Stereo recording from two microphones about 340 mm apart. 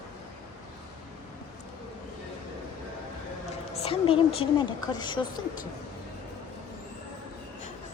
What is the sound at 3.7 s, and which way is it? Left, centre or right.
A woman's voice, centre.